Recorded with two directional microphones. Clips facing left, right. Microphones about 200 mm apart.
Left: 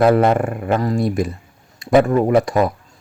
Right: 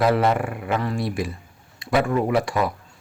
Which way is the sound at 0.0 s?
50° left (ahead or behind).